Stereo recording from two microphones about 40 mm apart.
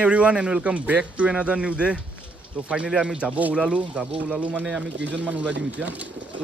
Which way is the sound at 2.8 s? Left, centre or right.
Centre.